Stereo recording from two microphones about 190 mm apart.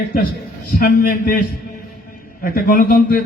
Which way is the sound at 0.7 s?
50° left (ahead or behind).